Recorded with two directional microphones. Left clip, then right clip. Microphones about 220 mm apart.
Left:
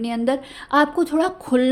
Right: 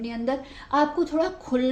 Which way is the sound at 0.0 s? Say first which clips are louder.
Left 6 dB; 45° left (ahead or behind).